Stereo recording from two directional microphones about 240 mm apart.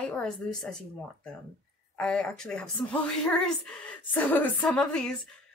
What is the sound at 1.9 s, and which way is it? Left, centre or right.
A woman's voice, centre.